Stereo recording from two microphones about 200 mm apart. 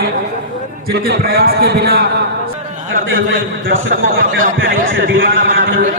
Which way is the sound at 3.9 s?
45° right (ahead or behind).